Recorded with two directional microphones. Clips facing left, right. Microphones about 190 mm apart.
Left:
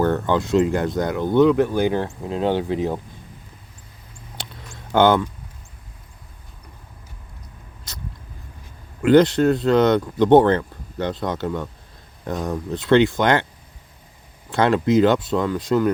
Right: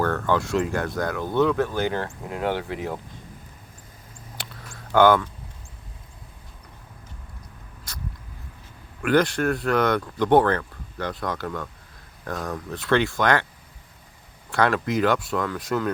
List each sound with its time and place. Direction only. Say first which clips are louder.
0.0 s speech: left 4 dB; 20° left (ahead or behind)
4.4 s a sound: left 3 dB; 20° left (ahead or behind)
4.9 s speech: left 1 dB; 20° left (ahead or behind)
9.0 s speech: left 7 dB; 20° left (ahead or behind)
14.5 s speech: left 5 dB; 20° left (ahead or behind)